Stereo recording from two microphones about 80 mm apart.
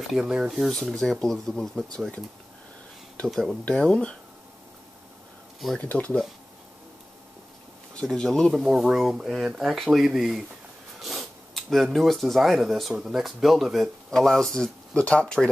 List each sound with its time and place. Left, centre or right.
0.1 s speech: centre
3.3 s speech: centre
5.8 s speech: centre
7.9 s speech: centre
8.5 s speech: centre